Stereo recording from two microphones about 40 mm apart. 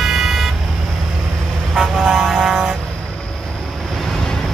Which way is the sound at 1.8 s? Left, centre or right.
Centre.